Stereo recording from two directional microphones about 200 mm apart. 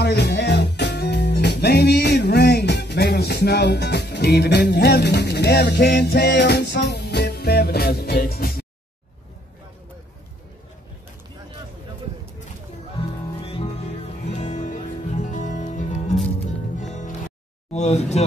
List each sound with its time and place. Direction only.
0.0 s music: 55° left (ahead or behind)
13.0 s music: 25° left (ahead or behind)
17.7 s a sound: 35° left (ahead or behind)